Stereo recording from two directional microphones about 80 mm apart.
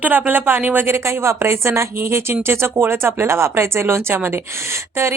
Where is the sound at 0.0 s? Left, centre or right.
Right.